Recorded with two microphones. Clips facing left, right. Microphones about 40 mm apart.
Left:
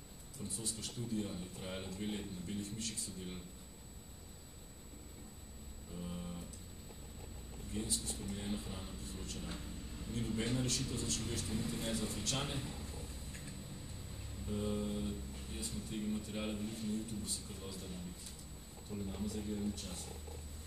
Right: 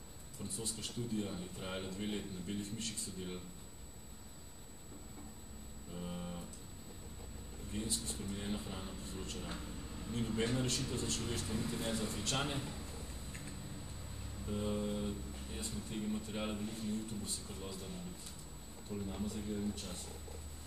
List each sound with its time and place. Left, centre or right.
0.4 s a man's voice: centre
5.9 s a sound: centre
7.7 s a man's voice: centre
14.4 s a man's voice: centre